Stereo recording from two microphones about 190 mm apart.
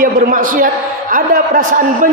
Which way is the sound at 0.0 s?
45° right (ahead or behind).